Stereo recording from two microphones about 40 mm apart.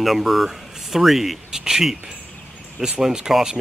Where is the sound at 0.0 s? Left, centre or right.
Centre.